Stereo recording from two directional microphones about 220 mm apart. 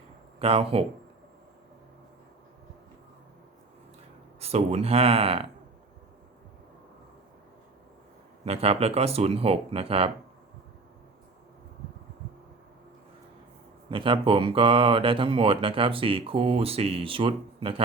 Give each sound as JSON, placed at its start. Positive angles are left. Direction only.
{"t": 0.3, "sound": "speech", "side_deg": -25}
{"t": 4.4, "sound": "speech", "side_deg": -30}
{"t": 8.4, "sound": "speech", "side_deg": -25}
{"t": 13.9, "sound": "speech", "side_deg": -25}